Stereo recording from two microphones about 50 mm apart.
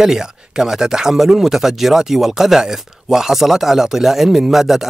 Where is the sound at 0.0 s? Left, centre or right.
Centre.